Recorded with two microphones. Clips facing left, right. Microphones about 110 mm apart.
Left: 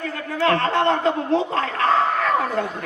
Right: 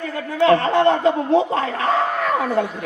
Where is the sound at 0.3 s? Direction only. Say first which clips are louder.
Right 4 dB; 15° right (ahead or behind).